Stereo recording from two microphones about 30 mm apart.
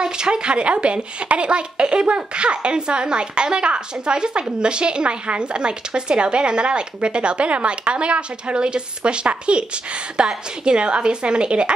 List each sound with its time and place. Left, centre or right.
0.0 s a woman's voice: right